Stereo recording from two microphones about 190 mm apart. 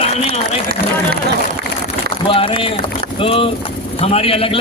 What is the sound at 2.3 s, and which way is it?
A man's voice, 30° left (ahead or behind).